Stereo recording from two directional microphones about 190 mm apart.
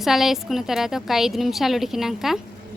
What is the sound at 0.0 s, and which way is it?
A woman's voice, centre (ahead or behind).